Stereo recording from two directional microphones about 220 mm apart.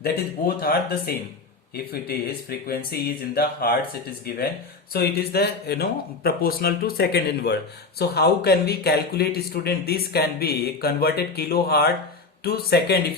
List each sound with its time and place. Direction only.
0.0 s a man's voice: 45° left (ahead or behind)
4.9 s a man's voice: 45° left (ahead or behind)